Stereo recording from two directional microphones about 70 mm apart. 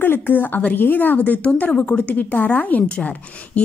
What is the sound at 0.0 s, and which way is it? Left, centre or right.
A woman's voice, left.